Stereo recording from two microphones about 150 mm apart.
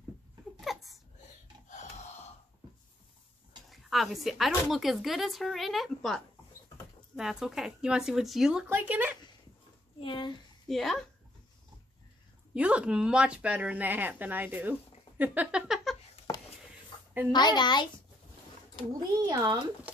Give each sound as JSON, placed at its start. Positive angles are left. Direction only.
{"t": 0.6, "sound": "a sound", "side_deg": 0}
{"t": 3.7, "sound": "speech", "side_deg": 0}
{"t": 9.9, "sound": "speech", "side_deg": 35}
{"t": 10.7, "sound": "speech", "side_deg": 0}
{"t": 12.5, "sound": "speech", "side_deg": -10}
{"t": 15.6, "sound": "a sound", "side_deg": 0}
{"t": 17.3, "sound": "a woman's voice", "side_deg": 30}
{"t": 18.9, "sound": "speech", "side_deg": -25}